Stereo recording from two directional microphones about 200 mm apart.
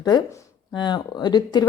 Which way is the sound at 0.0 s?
15° left (ahead or behind).